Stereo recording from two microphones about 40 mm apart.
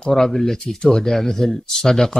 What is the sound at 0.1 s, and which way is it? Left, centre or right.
Speech, centre.